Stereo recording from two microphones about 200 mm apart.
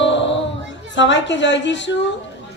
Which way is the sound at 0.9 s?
65° left (ahead or behind).